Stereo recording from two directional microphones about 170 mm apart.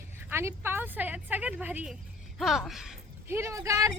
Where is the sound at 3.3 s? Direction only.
15° right (ahead or behind).